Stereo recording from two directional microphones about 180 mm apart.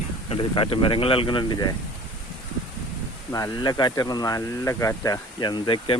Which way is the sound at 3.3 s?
20° left (ahead or behind).